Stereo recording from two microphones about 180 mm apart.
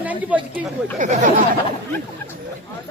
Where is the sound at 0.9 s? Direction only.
45° right (ahead or behind).